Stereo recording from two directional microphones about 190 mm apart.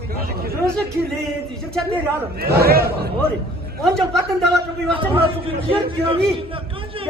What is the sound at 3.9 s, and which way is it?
A man's voice, centre (ahead or behind).